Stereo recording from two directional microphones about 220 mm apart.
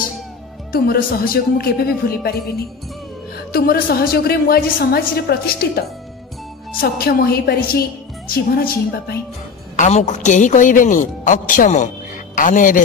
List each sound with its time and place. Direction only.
0.7 s a woman's voice: 40° left (ahead or behind)
3.5 s a woman's voice: 45° left (ahead or behind)
9.8 s a woman's voice: 30° left (ahead or behind)